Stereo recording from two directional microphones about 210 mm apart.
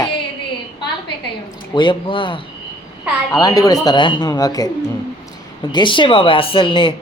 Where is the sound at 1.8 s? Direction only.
20° left (ahead or behind).